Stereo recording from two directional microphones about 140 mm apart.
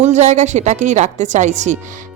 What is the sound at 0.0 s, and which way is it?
A woman's voice, 55° right (ahead or behind).